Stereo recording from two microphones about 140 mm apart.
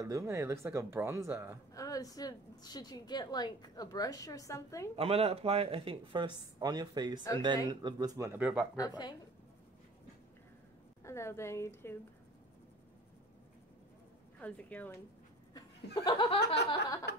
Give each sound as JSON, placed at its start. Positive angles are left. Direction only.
{"t": 0.0, "sound": "speech", "side_deg": -20}
{"t": 1.7, "sound": "a woman's voice", "side_deg": 25}
{"t": 4.9, "sound": "speech", "side_deg": -45}
{"t": 8.3, "sound": "speech", "side_deg": -10}
{"t": 8.7, "sound": "a woman's voice", "side_deg": 30}
{"t": 11.1, "sound": "a woman's voice", "side_deg": 20}
{"t": 14.4, "sound": "speech", "side_deg": 10}
{"t": 15.5, "sound": "laughter", "side_deg": 30}